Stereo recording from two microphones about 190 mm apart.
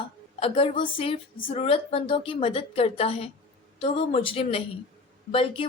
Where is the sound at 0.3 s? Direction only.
30° left (ahead or behind).